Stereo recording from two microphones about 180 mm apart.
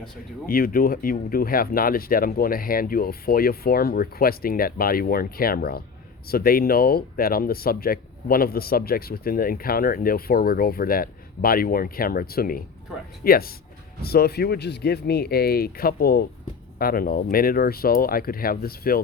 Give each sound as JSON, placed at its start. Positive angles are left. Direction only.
{"t": 0.4, "sound": "speech", "side_deg": 55}